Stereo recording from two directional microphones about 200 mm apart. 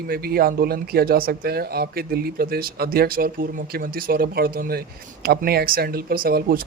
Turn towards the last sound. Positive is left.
turn(degrees=-45)  # may be behind; listen again after turning